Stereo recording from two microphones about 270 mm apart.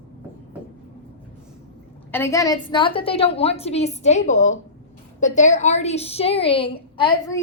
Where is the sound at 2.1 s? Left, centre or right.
Centre.